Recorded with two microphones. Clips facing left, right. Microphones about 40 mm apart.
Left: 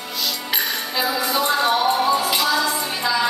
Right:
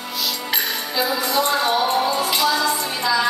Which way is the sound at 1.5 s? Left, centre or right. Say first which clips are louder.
Left 3 dB; centre.